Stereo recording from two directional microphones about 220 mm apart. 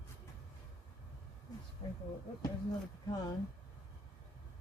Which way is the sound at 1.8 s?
25° left (ahead or behind).